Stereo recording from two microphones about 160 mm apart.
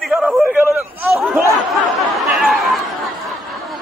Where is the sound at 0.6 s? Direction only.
15° right (ahead or behind).